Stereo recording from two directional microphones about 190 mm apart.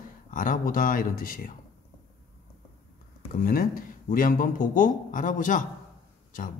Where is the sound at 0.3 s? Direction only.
45° left (ahead or behind).